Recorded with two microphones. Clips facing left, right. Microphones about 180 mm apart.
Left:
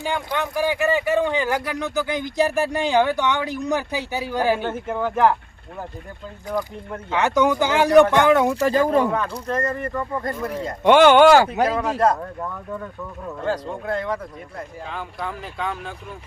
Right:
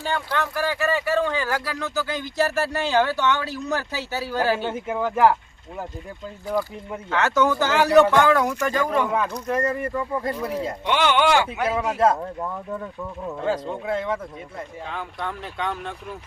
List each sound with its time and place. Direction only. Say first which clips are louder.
0.0 s a man's voice: left 1 dB; 15° left (ahead or behind)
4.7 s speech: left 1 dB; 5° right (ahead or behind)
7.1 s a man's voice: left 2 dB; 15° left (ahead or behind); by 9.0 s 30° left (ahead or behind)
9.5 s speech: even; 10° right (ahead or behind)
10.8 s speech: left 9 dB; 50° left (ahead or behind)
11.7 s speech: left 1 dB; 10° right (ahead or behind)